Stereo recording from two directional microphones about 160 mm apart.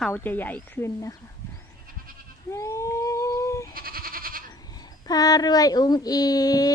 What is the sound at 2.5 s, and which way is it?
Sheep, 20° left (ahead or behind).